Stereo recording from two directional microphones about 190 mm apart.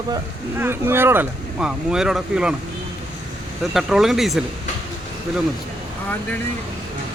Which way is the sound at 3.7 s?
Centre (ahead or behind).